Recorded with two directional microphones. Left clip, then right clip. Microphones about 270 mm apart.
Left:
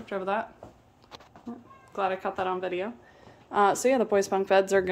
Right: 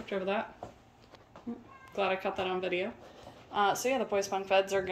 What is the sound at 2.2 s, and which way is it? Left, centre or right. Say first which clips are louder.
Speech: left 3 dB; centre.